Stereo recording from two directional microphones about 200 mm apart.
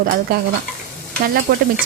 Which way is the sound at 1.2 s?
50° right (ahead or behind).